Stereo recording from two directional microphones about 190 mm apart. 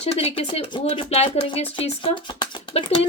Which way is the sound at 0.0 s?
35° left (ahead or behind).